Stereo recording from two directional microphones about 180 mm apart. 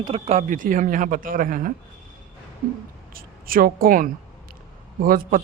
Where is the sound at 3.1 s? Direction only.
55° right (ahead or behind).